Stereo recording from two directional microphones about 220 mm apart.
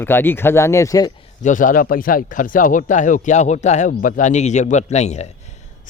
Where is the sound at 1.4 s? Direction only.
35° left (ahead or behind).